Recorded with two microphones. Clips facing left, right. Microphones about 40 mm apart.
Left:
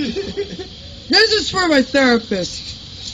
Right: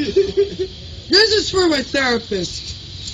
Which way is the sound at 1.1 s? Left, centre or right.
Left.